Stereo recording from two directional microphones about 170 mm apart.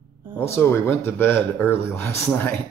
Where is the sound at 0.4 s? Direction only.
15° left (ahead or behind).